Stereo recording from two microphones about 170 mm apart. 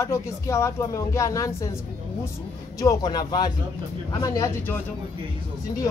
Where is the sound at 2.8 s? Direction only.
20° left (ahead or behind).